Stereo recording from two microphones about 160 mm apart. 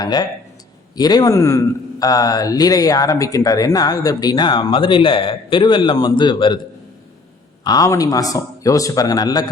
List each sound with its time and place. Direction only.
0.0 s speech: 25° left (ahead or behind)
7.6 s speech: 25° left (ahead or behind)